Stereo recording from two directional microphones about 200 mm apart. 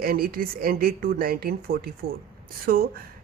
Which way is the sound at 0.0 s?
50° right (ahead or behind).